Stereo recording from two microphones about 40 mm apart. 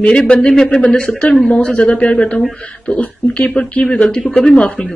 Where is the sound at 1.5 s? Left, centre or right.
Left.